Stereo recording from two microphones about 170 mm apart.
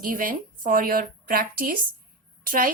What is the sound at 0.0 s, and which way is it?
A woman's voice, 55° right (ahead or behind).